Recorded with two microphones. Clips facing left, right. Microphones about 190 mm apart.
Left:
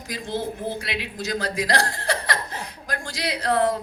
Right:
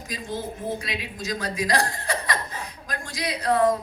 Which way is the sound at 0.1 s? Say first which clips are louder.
Left 3 dB; 75° left (ahead or behind).